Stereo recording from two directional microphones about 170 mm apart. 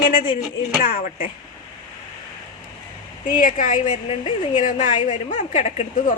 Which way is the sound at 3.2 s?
50° left (ahead or behind).